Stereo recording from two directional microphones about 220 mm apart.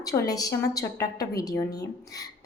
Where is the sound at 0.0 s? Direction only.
15° left (ahead or behind).